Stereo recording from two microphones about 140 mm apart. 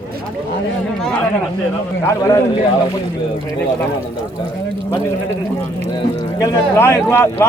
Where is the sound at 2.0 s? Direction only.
20° left (ahead or behind).